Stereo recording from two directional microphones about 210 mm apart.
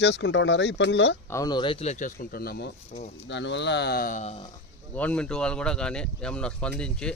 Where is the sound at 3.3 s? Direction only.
60° left (ahead or behind); by 4.5 s 30° left (ahead or behind).